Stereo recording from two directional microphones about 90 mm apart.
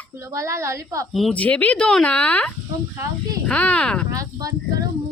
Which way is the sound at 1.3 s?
15° left (ahead or behind).